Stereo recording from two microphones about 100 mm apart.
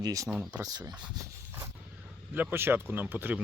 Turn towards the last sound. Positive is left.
turn(degrees=-15)  # may be behind; listen again after turning